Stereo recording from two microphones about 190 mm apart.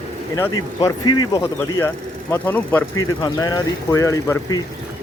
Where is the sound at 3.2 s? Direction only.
20° left (ahead or behind).